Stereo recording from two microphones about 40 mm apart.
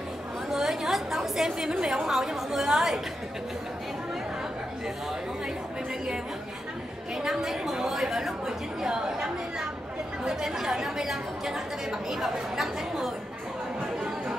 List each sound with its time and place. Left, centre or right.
0.5 s chatter: centre
1.7 s a woman's voice: centre
7.4 s a woman's voice: centre